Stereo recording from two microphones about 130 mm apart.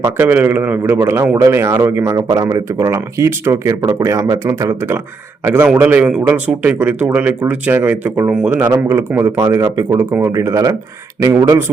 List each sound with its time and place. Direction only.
0.2 s speech: 15° right (ahead or behind)